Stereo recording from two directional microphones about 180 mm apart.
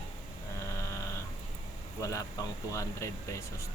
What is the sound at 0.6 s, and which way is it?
Sheep, 15° left (ahead or behind).